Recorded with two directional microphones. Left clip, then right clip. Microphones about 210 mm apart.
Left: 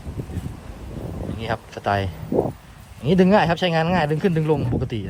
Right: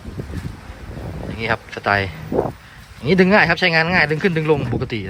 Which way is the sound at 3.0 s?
25° right (ahead or behind).